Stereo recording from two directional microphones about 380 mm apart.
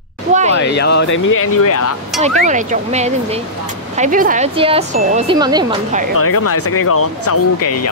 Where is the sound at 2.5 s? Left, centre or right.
Centre.